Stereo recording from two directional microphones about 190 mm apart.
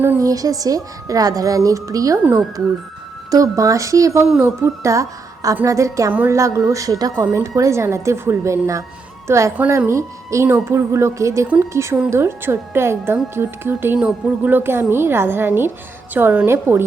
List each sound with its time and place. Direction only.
0.0 s a woman's voice: 15° right (ahead or behind)